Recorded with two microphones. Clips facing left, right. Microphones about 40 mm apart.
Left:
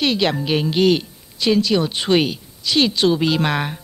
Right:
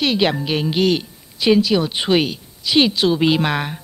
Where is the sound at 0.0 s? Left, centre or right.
Centre.